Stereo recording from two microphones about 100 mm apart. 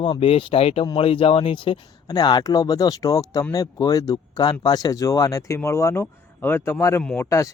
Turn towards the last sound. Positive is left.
turn(degrees=30)  # may be behind; listen again after turning